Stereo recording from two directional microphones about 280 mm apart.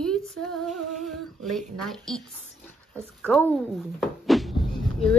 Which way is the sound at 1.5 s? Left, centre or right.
Centre.